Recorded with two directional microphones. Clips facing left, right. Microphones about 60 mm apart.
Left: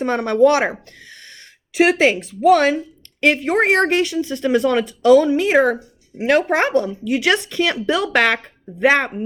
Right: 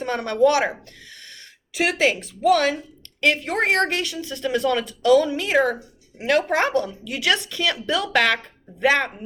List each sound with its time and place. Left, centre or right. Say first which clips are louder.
0.0 s speech: left 4 dB; left
1.7 s a woman's voice: left 6 dB; left